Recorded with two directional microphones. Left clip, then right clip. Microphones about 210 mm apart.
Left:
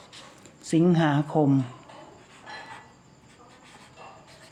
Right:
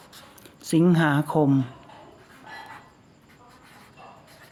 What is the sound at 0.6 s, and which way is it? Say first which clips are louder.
Speech: right 1 dB; 25° right (ahead or behind).